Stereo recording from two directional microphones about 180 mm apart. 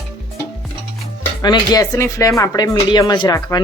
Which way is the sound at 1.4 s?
20° left (ahead or behind).